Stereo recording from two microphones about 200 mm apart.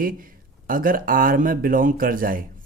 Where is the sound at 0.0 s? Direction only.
45° right (ahead or behind).